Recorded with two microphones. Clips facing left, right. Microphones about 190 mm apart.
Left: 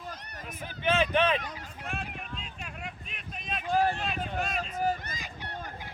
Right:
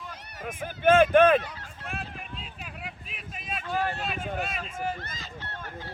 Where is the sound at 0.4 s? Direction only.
50° right (ahead or behind).